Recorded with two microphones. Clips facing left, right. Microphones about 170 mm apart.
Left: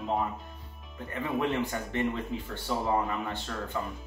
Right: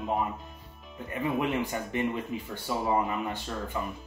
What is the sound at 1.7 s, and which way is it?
Speech, 15° right (ahead or behind).